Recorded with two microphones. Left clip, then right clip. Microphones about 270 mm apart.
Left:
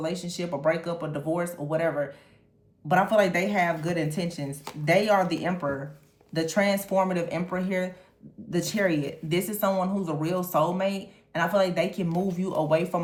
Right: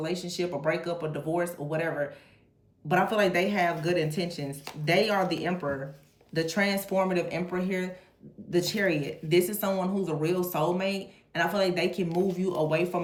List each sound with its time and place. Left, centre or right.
0.0 s speech: left